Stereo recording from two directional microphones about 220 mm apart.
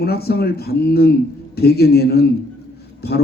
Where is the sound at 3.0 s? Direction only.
45° left (ahead or behind).